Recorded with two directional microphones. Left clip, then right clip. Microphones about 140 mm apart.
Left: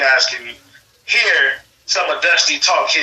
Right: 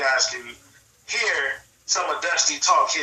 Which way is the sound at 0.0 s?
15° left (ahead or behind).